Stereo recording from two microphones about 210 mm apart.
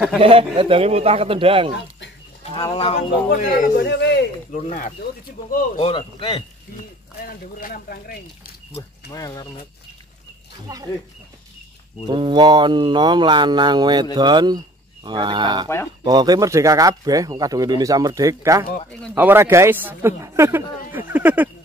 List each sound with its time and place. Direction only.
0.2 s speech: 25° right (ahead or behind)
2.4 s speech: 25° left (ahead or behind)
3.3 s speech: 40° left (ahead or behind)
3.8 s speech: 55° left (ahead or behind)
4.5 s speech: 35° left (ahead or behind)
5.8 s speech: 25° left (ahead or behind)
7.2 s speech: 45° left (ahead or behind)
9.1 s speech: 15° left (ahead or behind)
10.7 s speech: 15° right (ahead or behind)
12.1 s speech: 20° right (ahead or behind); by 21.5 s 5° right (ahead or behind)